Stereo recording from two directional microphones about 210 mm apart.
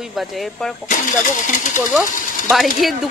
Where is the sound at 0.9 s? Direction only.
35° left (ahead or behind).